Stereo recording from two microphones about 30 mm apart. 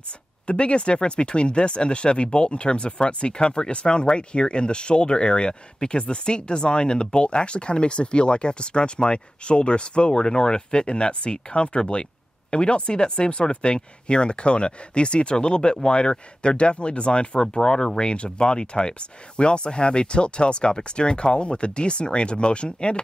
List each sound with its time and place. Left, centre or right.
0.5 s speech: left